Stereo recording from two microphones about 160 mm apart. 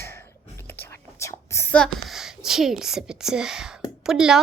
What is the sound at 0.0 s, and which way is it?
Whispering, 15° left (ahead or behind).